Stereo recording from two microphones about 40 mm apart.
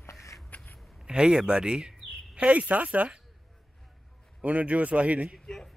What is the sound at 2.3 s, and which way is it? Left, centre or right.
Speech, right.